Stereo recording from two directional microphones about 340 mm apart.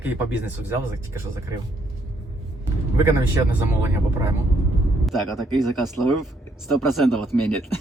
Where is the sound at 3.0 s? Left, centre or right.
Centre.